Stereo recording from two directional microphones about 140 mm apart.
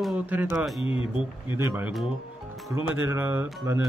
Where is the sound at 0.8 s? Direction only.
40° left (ahead or behind).